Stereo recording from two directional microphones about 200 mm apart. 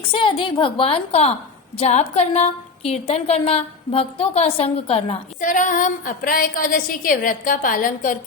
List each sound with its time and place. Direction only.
0.1 s a woman's voice: 25° left (ahead or behind)
5.4 s a woman's voice: 40° left (ahead or behind)